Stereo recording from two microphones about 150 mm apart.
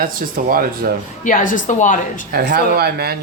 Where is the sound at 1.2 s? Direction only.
60° left (ahead or behind).